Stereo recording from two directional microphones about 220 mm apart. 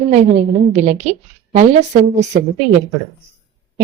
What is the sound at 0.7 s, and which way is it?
A woman's voice, 30° right (ahead or behind).